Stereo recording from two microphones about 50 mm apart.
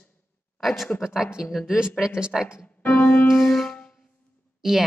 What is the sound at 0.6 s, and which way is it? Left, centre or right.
Speech, centre.